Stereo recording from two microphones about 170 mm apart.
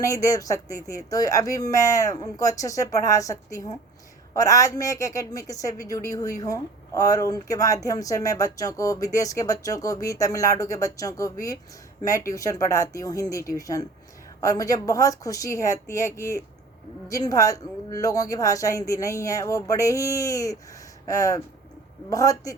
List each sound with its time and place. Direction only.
0.0 s a woman's voice: 20° left (ahead or behind)